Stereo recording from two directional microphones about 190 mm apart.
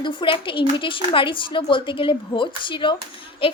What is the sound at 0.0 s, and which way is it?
Speech, 25° left (ahead or behind).